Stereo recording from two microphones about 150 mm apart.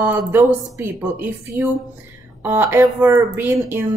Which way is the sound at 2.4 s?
15° right (ahead or behind).